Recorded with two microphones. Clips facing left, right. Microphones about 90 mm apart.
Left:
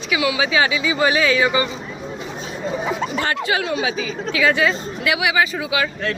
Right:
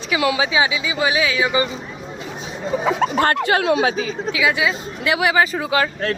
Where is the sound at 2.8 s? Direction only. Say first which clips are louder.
Right 7 dB; 80° right.